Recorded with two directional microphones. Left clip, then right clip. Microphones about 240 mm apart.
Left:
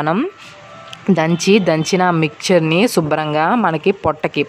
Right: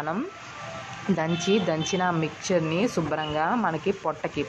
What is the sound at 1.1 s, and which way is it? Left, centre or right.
Speech, left.